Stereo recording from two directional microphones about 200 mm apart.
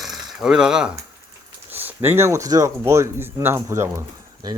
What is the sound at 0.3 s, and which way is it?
Speech, 5° right (ahead or behind).